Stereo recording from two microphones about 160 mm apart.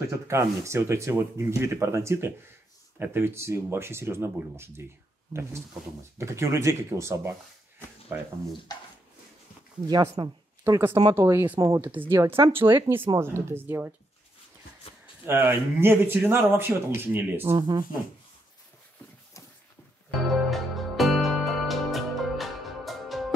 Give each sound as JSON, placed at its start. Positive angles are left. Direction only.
{"t": 0.3, "sound": "speech", "side_deg": -15}
{"t": 8.7, "sound": "speech", "side_deg": 25}
{"t": 9.8, "sound": "speech", "side_deg": -25}
{"t": 10.6, "sound": "speech", "side_deg": -15}
{"t": 12.3, "sound": "speech", "side_deg": -35}
{"t": 12.5, "sound": "speech", "side_deg": -15}
{"t": 15.2, "sound": "speech", "side_deg": -15}
{"t": 17.6, "sound": "speech", "side_deg": -25}
{"t": 20.4, "sound": "music", "side_deg": 0}